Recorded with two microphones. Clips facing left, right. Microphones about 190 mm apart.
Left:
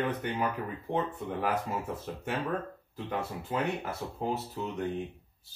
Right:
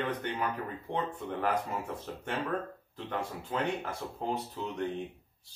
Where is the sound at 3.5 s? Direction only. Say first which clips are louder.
Left 1 dB; 5° left (ahead or behind).